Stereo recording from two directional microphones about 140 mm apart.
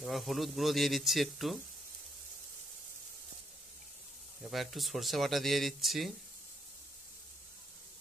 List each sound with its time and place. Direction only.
0.0 s speech: centre (ahead or behind)
4.5 s speech: centre (ahead or behind)